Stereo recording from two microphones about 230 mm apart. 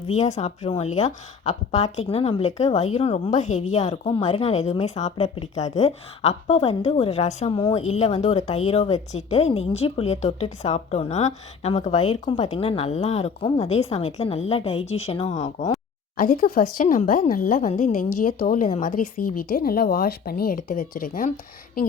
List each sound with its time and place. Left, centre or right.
0.1 s a woman's voice: left